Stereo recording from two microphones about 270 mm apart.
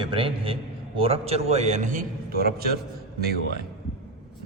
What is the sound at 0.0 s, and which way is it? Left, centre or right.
A man's voice, centre.